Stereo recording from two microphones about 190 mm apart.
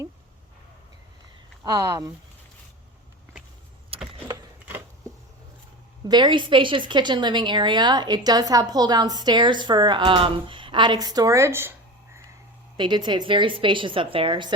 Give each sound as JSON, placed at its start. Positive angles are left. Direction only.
{"t": 1.6, "sound": "speech", "side_deg": -15}
{"t": 6.1, "sound": "speech", "side_deg": -25}
{"t": 12.7, "sound": "speech", "side_deg": -25}